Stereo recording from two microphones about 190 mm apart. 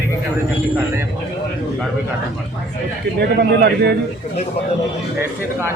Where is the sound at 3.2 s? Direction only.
60° right (ahead or behind).